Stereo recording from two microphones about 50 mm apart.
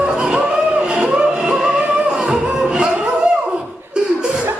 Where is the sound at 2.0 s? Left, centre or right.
Centre.